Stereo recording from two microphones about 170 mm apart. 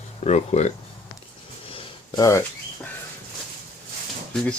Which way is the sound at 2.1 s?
20° left (ahead or behind).